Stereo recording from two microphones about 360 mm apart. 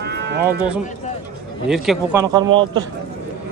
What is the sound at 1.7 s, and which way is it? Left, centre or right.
Speech, centre.